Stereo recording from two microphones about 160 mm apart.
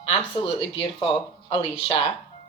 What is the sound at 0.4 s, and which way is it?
Speech, 35° left (ahead or behind).